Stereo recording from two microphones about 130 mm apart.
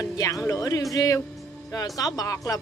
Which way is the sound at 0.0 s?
25° left (ahead or behind).